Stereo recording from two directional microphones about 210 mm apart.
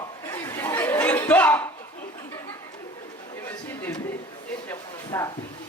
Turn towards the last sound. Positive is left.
turn(degrees=15)  # may be behind; listen again after turning